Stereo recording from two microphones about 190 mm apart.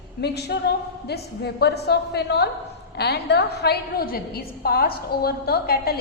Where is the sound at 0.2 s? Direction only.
60° left (ahead or behind).